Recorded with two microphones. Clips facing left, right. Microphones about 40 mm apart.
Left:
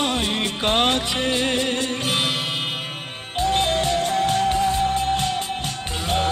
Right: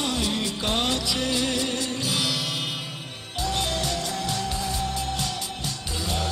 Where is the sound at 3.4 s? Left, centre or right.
Left.